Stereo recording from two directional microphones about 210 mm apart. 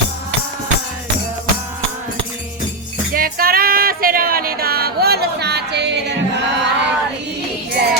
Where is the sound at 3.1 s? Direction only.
45° right (ahead or behind).